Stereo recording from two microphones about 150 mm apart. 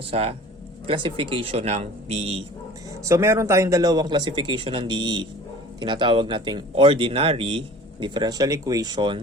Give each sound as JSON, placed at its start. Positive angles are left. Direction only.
{"t": 0.1, "sound": "speech", "side_deg": -40}
{"t": 3.0, "sound": "speech", "side_deg": -20}